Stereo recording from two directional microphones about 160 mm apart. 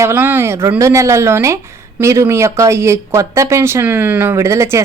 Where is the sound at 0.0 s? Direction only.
15° right (ahead or behind).